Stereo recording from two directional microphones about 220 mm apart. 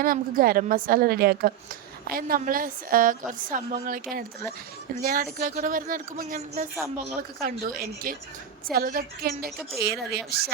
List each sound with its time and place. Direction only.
0.0 s a woman's voice: 40° right (ahead or behind)
5.0 s a woman's voice: 40° right (ahead or behind)